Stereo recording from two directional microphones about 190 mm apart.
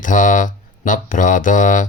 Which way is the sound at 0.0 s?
45° left (ahead or behind).